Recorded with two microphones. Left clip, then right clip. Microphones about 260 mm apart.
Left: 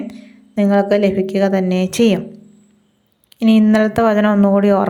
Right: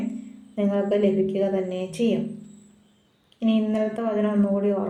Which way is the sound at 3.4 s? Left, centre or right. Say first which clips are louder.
Left 10 dB; left.